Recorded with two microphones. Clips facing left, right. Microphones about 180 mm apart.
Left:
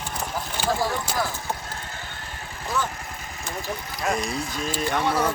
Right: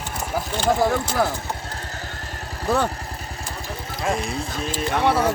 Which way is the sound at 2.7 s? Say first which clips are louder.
Right 7 dB; 60° right (ahead or behind).